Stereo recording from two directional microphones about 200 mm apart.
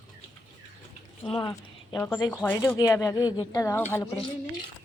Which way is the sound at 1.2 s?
25° left (ahead or behind).